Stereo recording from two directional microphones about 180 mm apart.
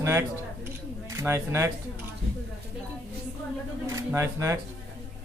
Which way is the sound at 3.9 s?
15° right (ahead or behind).